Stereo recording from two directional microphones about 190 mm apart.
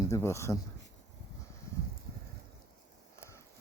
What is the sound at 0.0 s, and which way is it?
Speech, 15° left (ahead or behind).